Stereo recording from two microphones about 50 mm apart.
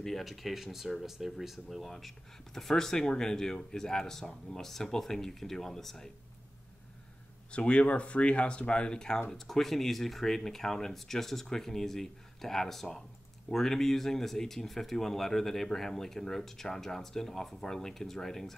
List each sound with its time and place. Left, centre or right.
0.0 s speech: centre
7.5 s speech: left
9.3 s speech: centre